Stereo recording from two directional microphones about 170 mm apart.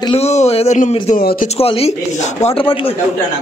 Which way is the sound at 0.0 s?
35° left (ahead or behind).